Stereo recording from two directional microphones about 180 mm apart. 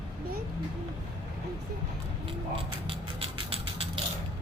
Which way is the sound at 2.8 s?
30° right (ahead or behind).